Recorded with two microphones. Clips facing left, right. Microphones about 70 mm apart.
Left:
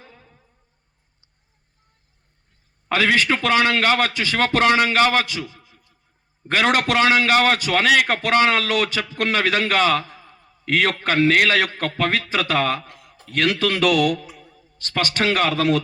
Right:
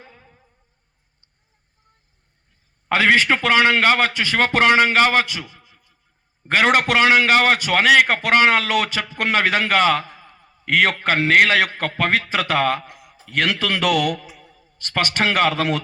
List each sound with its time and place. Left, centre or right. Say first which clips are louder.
0.0 s insect: right 1 dB; right
3.2 s a man's voice: right 2 dB; right
14.3 s mantra: left 1 dB; centre
14.8 s a man's voice: right 1 dB; right